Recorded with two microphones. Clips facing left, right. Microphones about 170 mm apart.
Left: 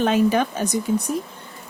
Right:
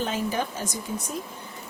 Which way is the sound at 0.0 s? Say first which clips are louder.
Left 9 dB; 70° left (ahead or behind).